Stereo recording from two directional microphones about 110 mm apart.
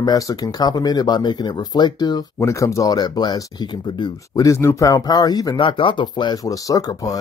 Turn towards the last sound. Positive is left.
turn(degrees=30)  # may be behind; listen again after turning